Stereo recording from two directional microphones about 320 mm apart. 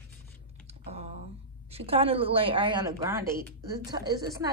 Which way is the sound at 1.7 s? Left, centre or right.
Centre.